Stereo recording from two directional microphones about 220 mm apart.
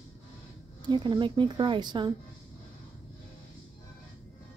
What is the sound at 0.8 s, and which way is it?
Speech, 20° right (ahead or behind).